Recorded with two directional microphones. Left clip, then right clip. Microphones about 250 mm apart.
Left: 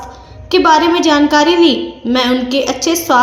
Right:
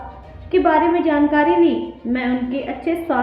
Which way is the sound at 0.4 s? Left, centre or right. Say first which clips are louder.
Left 6 dB; left.